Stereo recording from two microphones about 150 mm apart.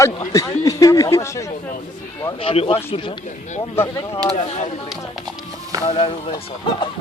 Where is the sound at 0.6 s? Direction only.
20° left (ahead or behind).